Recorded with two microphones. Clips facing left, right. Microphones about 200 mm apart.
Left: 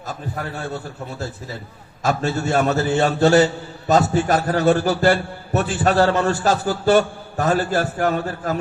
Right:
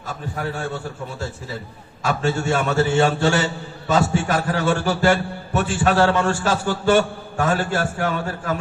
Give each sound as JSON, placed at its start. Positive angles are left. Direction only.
{"t": 2.0, "sound": "a man's voice", "side_deg": 40}